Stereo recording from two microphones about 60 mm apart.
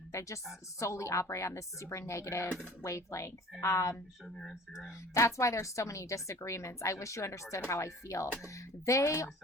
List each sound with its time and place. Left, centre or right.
0.1 s a woman's voice: left
4.4 s speech: centre
5.1 s a woman's voice: left